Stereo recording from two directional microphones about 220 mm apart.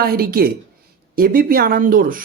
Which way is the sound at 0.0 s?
45° right (ahead or behind).